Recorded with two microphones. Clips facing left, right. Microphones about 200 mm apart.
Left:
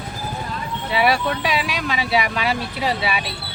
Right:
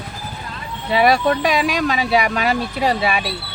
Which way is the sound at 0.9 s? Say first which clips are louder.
Right 4 dB; 45° right (ahead or behind).